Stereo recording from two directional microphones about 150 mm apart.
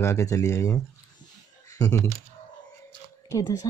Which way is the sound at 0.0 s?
20° left (ahead or behind).